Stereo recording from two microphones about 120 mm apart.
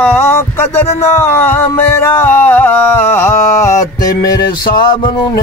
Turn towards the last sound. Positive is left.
turn(degrees=40)  # may be behind; listen again after turning